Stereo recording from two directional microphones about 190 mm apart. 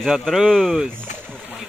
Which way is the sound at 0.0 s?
Centre (ahead or behind).